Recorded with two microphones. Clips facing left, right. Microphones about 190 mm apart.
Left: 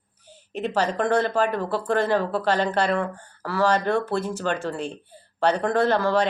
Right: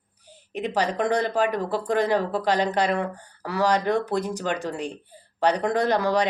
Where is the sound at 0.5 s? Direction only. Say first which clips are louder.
Left 1 dB; 15° right (ahead or behind).